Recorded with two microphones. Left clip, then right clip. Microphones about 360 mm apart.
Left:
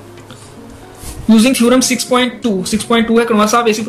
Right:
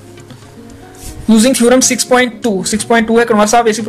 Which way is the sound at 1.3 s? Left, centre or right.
Right.